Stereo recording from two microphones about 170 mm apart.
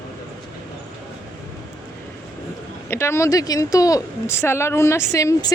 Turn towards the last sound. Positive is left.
turn(degrees=20)  # may be behind; listen again after turning